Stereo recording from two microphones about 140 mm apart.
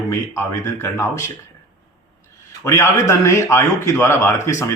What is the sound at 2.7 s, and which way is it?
Speech, 20° left (ahead or behind).